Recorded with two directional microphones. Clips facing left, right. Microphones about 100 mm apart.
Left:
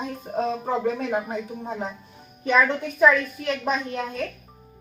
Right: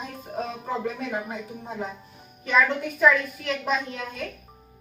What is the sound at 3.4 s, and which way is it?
Speech, 35° left (ahead or behind).